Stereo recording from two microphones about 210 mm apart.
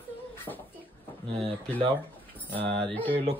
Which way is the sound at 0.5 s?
10° left (ahead or behind).